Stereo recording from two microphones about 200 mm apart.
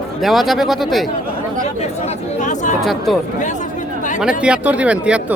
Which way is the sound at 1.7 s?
35° left (ahead or behind).